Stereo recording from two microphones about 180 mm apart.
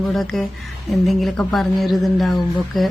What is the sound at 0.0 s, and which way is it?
Speech, centre (ahead or behind).